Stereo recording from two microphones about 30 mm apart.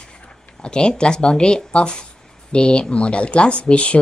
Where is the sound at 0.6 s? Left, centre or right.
Left.